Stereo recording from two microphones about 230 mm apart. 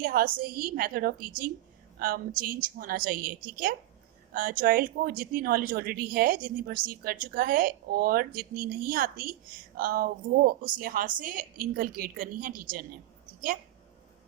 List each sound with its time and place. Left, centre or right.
0.0 s a woman's voice: right